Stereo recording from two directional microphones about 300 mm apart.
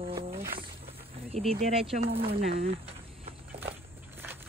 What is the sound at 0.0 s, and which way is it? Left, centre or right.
Wild animals, centre.